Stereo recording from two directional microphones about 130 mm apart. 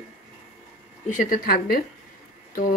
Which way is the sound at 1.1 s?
90° left.